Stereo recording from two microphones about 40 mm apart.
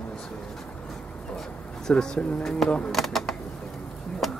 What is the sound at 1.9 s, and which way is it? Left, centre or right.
Speech, left.